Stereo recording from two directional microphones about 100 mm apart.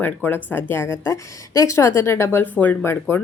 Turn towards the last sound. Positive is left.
turn(degrees=25)  # may be behind; listen again after turning